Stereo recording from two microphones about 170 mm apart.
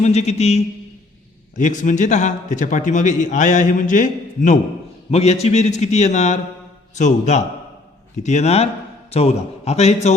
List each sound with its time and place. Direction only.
0.0 s a man's voice: 40° left (ahead or behind)